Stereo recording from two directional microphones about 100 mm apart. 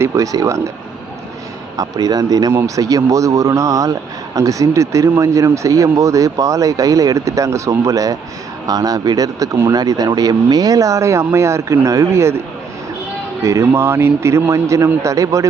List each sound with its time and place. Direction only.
0.0 s speech: 30° right (ahead or behind)
1.7 s speech: 40° right (ahead or behind)
13.4 s a man's voice: 30° right (ahead or behind)